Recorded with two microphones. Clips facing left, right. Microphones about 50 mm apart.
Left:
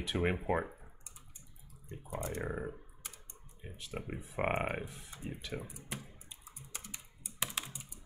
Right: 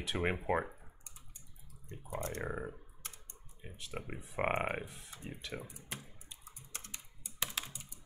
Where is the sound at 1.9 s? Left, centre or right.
Centre.